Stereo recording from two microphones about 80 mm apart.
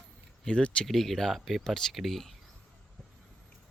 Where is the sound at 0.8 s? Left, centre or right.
Centre.